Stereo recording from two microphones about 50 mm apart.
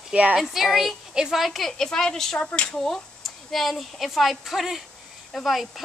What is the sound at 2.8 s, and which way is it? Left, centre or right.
Speech, centre.